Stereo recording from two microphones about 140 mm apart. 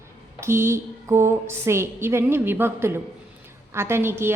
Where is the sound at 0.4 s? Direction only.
20° right (ahead or behind).